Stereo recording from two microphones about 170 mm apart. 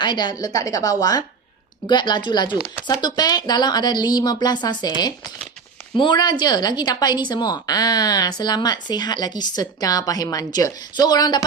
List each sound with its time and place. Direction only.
0.0 s a woman's voice: 25° left (ahead or behind)